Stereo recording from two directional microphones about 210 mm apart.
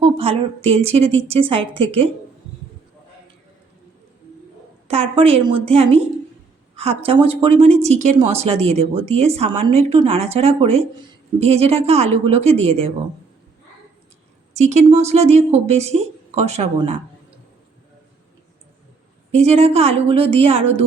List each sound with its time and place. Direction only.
0.0 s speech: 30° right (ahead or behind)
4.9 s speech: 30° right (ahead or behind)
14.5 s speech: 35° right (ahead or behind)
19.4 s speech: 30° right (ahead or behind)